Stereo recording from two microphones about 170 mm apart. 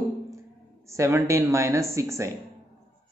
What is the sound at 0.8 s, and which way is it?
A woman's voice, 15° right (ahead or behind).